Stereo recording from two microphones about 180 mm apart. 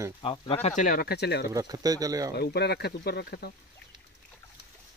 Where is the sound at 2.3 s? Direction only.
65° left (ahead or behind).